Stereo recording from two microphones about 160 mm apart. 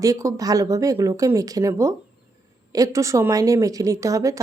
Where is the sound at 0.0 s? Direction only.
20° right (ahead or behind).